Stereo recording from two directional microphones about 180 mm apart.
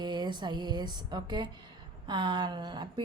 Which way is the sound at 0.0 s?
25° right (ahead or behind).